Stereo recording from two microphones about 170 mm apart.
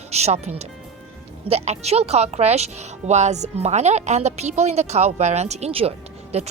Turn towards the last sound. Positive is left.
turn(degrees=-40)  # may be behind; listen again after turning